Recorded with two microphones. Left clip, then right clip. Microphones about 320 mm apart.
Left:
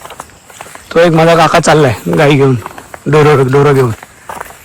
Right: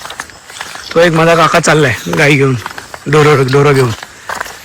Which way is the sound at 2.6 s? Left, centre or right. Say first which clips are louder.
Even; centre.